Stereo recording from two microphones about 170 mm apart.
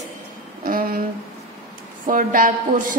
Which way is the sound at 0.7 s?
55° right (ahead or behind).